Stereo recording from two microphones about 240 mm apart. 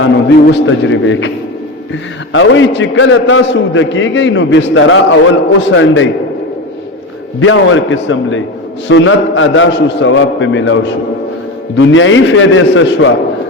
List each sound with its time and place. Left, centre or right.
0.0 s a man's voice: left
2.3 s a man's voice: left
7.3 s a man's voice: left